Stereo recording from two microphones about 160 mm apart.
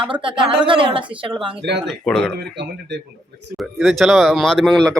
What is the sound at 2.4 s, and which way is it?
Speech, 90° right.